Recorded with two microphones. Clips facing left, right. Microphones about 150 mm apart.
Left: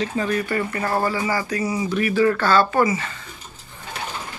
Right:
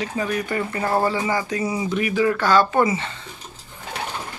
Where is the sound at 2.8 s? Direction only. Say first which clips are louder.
Even; 25° right (ahead or behind).